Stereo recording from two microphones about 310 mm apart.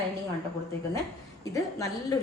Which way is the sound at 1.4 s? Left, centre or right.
Centre.